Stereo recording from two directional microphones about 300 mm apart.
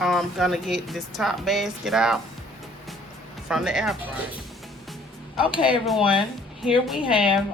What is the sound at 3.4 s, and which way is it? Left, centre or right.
Speech, centre.